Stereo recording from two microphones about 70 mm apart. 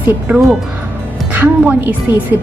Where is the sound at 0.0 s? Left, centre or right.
Right.